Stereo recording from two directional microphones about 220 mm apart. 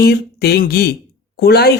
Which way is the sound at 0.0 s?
45° left (ahead or behind).